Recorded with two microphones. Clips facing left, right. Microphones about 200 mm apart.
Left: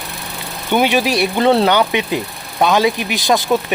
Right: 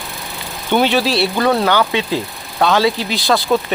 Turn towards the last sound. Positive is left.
turn(degrees=15)  # may be behind; listen again after turning